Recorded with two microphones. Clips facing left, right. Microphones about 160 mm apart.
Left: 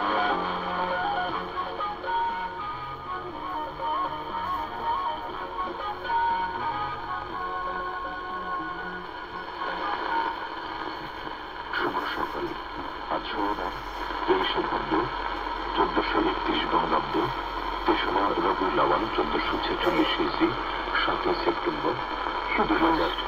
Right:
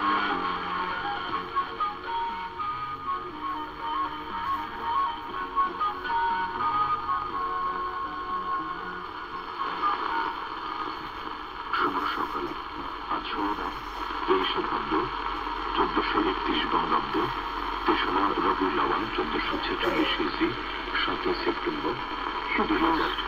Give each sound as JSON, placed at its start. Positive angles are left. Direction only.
{"t": 0.0, "sound": "music", "side_deg": 30}
{"t": 11.8, "sound": "radio", "side_deg": 45}
{"t": 17.8, "sound": "speech", "side_deg": 30}